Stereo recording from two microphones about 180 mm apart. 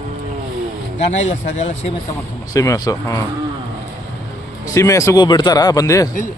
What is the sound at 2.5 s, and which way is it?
Speech, 20° left (ahead or behind).